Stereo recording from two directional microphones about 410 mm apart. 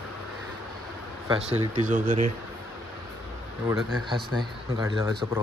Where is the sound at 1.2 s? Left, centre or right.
Centre.